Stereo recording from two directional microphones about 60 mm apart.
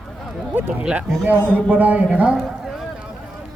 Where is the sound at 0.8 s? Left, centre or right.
Centre.